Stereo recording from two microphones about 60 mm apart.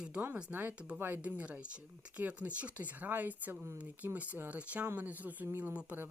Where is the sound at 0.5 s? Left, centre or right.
Right.